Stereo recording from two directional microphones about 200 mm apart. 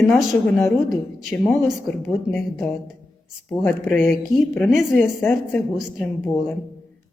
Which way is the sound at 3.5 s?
10° left (ahead or behind).